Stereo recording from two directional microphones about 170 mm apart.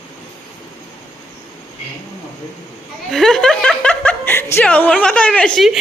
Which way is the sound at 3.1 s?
Centre (ahead or behind).